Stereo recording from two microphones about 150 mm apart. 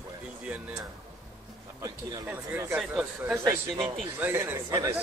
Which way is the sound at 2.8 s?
5° right (ahead or behind).